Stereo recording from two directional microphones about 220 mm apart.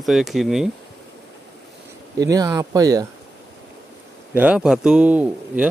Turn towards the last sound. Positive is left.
turn(degrees=-5)  # may be behind; listen again after turning